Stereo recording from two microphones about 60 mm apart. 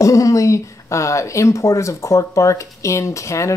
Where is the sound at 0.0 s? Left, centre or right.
Left.